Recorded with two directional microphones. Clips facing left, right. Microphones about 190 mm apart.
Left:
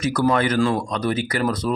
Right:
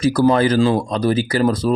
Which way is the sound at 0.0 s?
30° right (ahead or behind).